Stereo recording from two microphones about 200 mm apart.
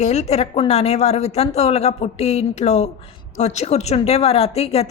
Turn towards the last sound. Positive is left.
turn(degrees=30)  # may be behind; listen again after turning